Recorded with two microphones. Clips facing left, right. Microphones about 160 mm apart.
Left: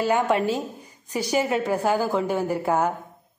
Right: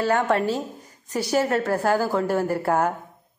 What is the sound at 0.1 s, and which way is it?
A woman's voice, 15° left (ahead or behind).